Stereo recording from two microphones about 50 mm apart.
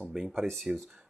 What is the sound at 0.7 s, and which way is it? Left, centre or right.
Speech, right.